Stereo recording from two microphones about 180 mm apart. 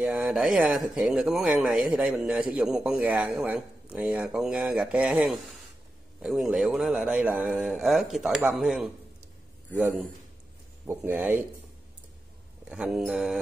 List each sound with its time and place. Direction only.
0.0 s speech: 5° right (ahead or behind)
12.6 s speech: 5° right (ahead or behind)